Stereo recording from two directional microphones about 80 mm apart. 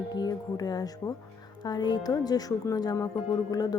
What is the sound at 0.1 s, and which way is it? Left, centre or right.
Speech, left.